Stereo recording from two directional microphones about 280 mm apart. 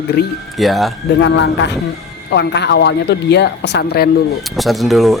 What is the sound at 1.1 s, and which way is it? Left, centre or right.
Speech, left.